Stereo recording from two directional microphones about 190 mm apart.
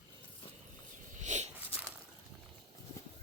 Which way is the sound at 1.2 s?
40° right (ahead or behind).